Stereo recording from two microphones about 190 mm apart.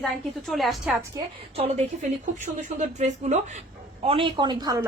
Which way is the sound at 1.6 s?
35° right (ahead or behind).